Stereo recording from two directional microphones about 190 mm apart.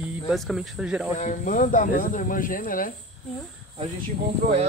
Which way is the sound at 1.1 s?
40° left (ahead or behind).